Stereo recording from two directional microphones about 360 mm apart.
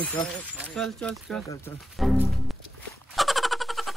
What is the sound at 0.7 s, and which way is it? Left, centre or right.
Speech, centre.